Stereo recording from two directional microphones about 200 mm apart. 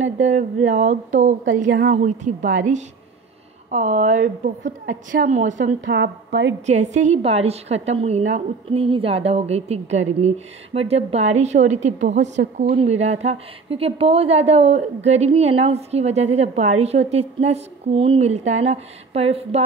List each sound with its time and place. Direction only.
0.0 s a woman's voice: 35° right (ahead or behind)
5.9 s a woman's voice: 60° right (ahead or behind)
6.6 s a woman's voice: 35° right (ahead or behind)